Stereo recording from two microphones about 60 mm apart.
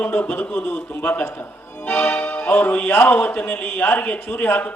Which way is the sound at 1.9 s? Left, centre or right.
Centre.